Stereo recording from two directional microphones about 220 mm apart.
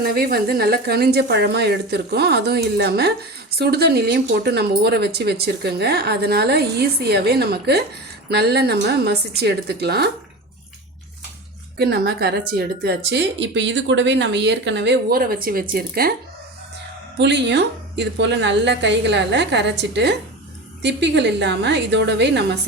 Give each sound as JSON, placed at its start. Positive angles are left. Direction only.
{"t": 0.0, "sound": "a woman's voice", "side_deg": -45}
{"t": 11.8, "sound": "a woman's voice", "side_deg": -45}
{"t": 17.2, "sound": "a woman's voice", "side_deg": -50}